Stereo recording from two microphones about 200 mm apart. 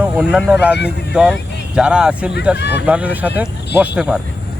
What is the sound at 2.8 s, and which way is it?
Speech, 5° right (ahead or behind).